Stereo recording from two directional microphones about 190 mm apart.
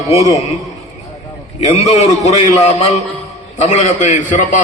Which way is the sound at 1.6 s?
35° left (ahead or behind).